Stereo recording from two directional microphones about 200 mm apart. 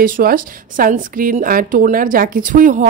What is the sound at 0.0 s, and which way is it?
A woman's voice, 45° right (ahead or behind).